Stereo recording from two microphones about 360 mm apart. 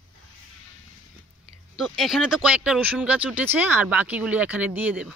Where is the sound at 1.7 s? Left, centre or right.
Centre.